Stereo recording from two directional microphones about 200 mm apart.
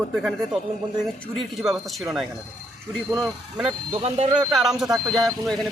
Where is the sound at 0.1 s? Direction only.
Centre (ahead or behind).